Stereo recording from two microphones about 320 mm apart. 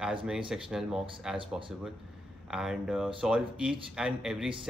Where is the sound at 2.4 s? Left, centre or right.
Centre.